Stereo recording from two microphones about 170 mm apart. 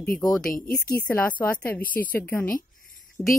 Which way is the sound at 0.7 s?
60° left (ahead or behind).